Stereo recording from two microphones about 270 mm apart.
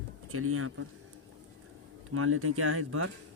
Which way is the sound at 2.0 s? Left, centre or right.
Right.